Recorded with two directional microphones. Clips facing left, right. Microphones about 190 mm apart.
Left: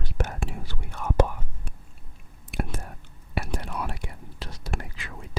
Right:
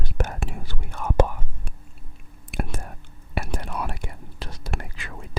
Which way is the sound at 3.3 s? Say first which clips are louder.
Right 1 dB; 50° right (ahead or behind).